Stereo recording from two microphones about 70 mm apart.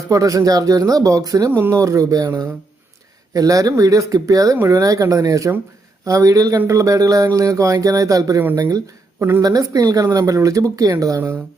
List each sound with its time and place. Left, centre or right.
0.1 s speech: right
1.5 s speech: right
9.4 s speech: right